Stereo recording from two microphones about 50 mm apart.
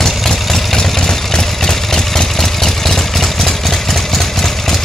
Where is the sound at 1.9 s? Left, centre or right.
Centre.